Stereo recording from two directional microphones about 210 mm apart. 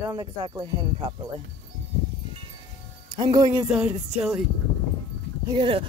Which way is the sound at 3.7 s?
5° right (ahead or behind).